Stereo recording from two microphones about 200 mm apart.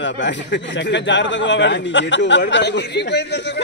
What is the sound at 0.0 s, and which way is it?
A man's voice, 65° left (ahead or behind).